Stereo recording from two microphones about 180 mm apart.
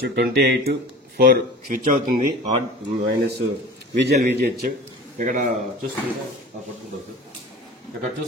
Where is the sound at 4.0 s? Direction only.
60° right (ahead or behind).